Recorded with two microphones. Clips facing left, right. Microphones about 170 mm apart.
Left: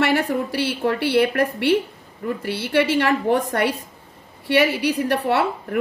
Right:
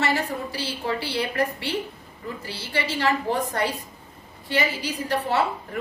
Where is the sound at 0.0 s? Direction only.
60° left (ahead or behind).